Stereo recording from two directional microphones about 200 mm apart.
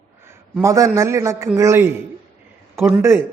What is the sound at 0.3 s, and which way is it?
A man's voice, 15° right (ahead or behind).